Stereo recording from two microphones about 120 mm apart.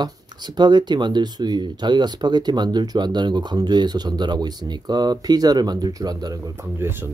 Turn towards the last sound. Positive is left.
turn(degrees=-20)  # may be behind; listen again after turning